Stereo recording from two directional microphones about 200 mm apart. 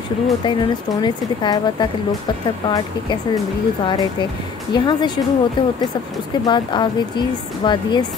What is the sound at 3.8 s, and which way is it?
A woman's voice, 25° left (ahead or behind).